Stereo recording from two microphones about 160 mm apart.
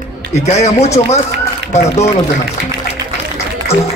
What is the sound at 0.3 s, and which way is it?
Speech, 45° left (ahead or behind).